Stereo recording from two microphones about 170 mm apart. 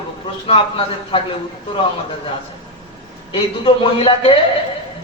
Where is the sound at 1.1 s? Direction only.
30° left (ahead or behind).